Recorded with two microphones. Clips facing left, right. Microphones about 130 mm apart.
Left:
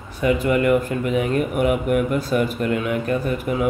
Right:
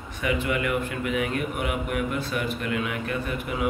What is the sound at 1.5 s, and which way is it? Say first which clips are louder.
Speech: left 9 dB; 50° left (ahead or behind).